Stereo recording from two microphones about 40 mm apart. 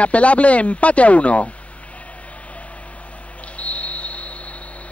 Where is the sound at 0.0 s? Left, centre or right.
Left.